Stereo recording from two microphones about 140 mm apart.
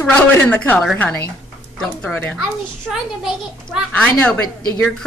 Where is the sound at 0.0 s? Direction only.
10° left (ahead or behind).